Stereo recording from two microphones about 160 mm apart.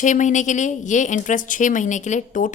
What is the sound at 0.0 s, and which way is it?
A woman's voice, 50° left (ahead or behind).